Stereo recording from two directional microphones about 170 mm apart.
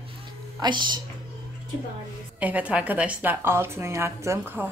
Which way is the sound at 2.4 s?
10° right (ahead or behind).